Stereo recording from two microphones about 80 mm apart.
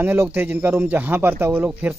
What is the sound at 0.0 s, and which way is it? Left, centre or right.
A man's voice, right.